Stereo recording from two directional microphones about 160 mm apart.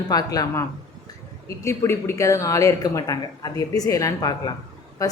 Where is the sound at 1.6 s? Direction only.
15° left (ahead or behind).